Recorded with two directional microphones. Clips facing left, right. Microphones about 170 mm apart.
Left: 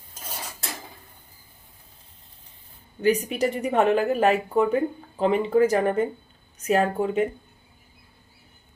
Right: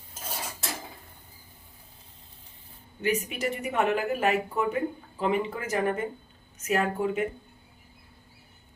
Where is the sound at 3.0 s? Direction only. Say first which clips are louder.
Left 6 dB; 35° left (ahead or behind).